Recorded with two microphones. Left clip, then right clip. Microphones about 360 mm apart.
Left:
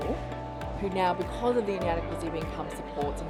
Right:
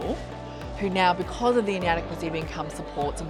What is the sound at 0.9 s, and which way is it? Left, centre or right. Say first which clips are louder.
Speech: right 5 dB; right.